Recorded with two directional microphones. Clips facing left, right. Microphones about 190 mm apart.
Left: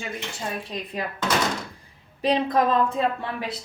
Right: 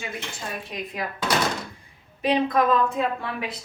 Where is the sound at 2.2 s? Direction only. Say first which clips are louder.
Even; 35° left (ahead or behind).